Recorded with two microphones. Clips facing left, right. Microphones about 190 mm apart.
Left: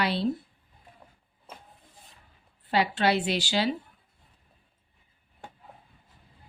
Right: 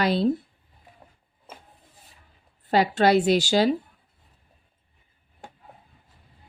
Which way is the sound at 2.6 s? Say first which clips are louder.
Right 5 dB; 40° right (ahead or behind).